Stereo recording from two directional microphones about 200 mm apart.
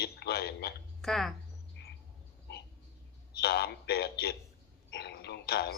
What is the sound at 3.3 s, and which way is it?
A man's voice, 55° left (ahead or behind).